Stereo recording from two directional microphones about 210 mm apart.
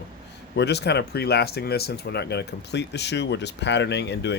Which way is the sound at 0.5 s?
55° left (ahead or behind).